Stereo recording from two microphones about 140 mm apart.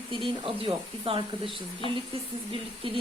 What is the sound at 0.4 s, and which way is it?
Speech, 40° right (ahead or behind).